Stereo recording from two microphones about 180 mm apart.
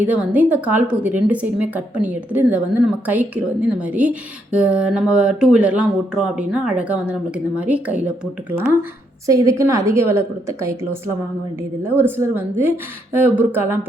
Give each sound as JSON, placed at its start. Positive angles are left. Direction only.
{"t": 0.0, "sound": "a woman's voice", "side_deg": -10}
{"t": 9.2, "sound": "a woman's voice", "side_deg": -15}
{"t": 11.8, "sound": "a woman's voice", "side_deg": -10}